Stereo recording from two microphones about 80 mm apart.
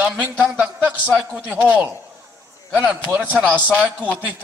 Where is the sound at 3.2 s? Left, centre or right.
Centre.